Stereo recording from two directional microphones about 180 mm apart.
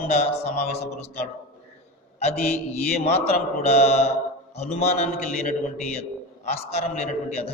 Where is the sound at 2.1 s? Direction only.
35° left (ahead or behind).